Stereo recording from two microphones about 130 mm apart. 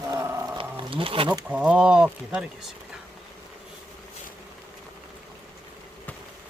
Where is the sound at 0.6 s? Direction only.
40° right (ahead or behind).